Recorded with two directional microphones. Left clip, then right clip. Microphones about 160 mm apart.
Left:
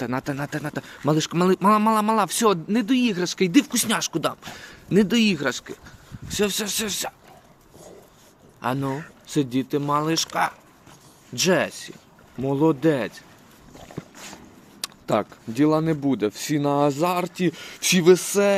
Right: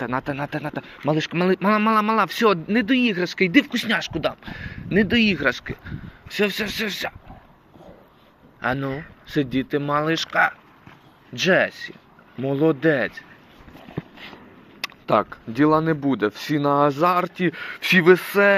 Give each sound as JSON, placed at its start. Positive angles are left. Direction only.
{"t": 0.0, "sound": "speech", "side_deg": 35}
{"t": 8.6, "sound": "speech", "side_deg": 25}
{"t": 14.0, "sound": "dog", "side_deg": -20}
{"t": 14.8, "sound": "speech", "side_deg": 20}
{"t": 17.4, "sound": "speech", "side_deg": 30}
{"t": 17.9, "sound": "speech", "side_deg": 20}